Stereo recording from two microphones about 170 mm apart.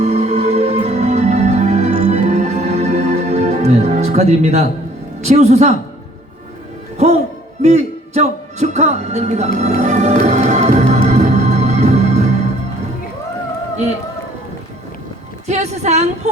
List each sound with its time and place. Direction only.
0.0 s music: 40° right (ahead or behind)
5.2 s a woman's voice: 40° right (ahead or behind)
7.6 s speech: 40° right (ahead or behind)
9.6 s music: 40° right (ahead or behind)
15.4 s a woman's voice: 40° right (ahead or behind)